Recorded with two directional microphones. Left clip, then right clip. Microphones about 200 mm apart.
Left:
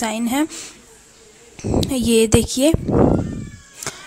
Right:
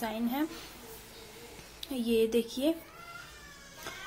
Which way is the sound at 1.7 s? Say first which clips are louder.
Left 13 dB; 45° left (ahead or behind).